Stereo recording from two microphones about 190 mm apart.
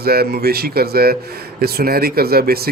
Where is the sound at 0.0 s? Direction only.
55° right (ahead or behind).